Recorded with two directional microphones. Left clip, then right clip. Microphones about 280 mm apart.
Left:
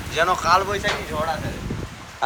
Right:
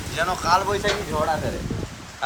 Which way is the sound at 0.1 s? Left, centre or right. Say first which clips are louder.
Left 3 dB; centre.